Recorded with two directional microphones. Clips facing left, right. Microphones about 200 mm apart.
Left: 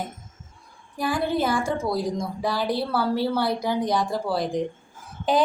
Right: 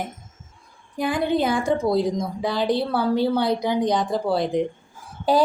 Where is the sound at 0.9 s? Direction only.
20° right (ahead or behind).